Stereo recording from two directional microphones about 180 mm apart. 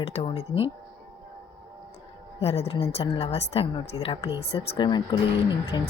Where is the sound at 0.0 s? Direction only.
35° left (ahead or behind).